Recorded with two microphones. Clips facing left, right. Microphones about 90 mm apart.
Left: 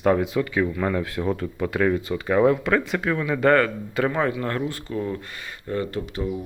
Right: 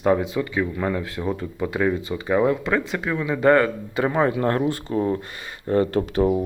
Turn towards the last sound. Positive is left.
turn(degrees=-65)  # may be behind; listen again after turning